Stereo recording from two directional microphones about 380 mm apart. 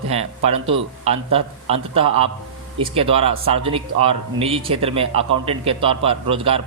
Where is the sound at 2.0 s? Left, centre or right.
Centre.